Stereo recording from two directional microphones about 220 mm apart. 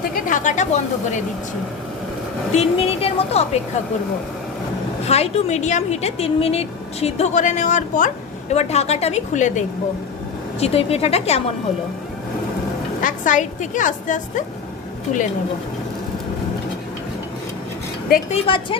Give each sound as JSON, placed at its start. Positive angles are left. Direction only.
{"t": 0.0, "sound": "a woman's voice", "side_deg": 40}
{"t": 2.5, "sound": "a woman's voice", "side_deg": 30}
{"t": 5.0, "sound": "a woman's voice", "side_deg": 30}
{"t": 13.0, "sound": "a woman's voice", "side_deg": 35}
{"t": 18.4, "sound": "a woman's voice", "side_deg": 25}